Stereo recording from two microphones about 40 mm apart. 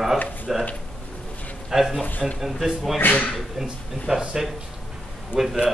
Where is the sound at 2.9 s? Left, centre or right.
Left.